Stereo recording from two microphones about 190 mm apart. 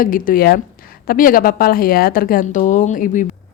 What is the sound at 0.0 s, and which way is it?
A woman's voice, 45° left (ahead or behind).